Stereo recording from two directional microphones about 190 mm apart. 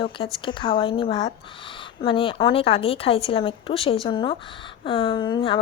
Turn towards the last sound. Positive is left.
turn(degrees=25)  # may be behind; listen again after turning